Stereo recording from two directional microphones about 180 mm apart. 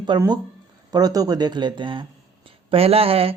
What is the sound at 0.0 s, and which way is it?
Speech, 25° right (ahead or behind).